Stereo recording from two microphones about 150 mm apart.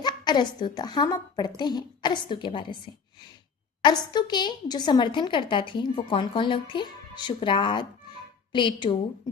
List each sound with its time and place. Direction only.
0.0 s a woman's voice: 30° left (ahead or behind)
3.8 s a woman's voice: 30° left (ahead or behind)